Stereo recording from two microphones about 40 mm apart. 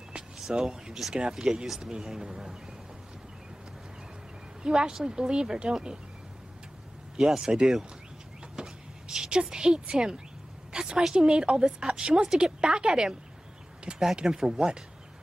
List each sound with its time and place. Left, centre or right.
0.6 s a woman's voice: centre
4.6 s a woman's voice: right
7.2 s speech: centre
8.5 s a sound: centre
9.8 s a woman's voice: centre
14.1 s a woman's voice: centre